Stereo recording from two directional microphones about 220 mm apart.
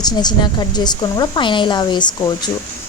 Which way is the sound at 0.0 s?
20° left (ahead or behind).